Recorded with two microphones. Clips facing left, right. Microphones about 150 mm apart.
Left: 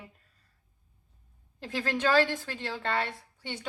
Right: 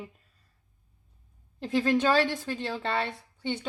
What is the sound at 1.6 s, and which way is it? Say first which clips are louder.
A woman's voice: right 5 dB; 20° right (ahead or behind).